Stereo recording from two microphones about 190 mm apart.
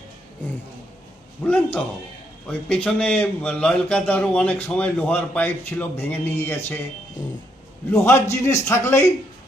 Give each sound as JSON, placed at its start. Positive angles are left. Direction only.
{"t": 1.5, "sound": "a man's voice", "side_deg": 5}
{"t": 8.0, "sound": "speech", "side_deg": 15}